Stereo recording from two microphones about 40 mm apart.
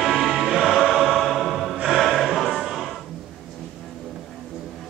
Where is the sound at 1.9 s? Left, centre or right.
Centre.